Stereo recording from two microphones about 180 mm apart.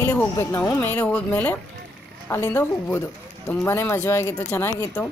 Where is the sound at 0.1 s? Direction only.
10° left (ahead or behind).